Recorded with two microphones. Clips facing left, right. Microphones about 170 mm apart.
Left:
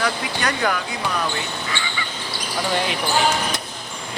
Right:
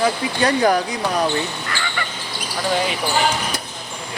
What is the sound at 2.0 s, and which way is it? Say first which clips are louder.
Basketball bounce: right 4 dB; 60° right (ahead or behind).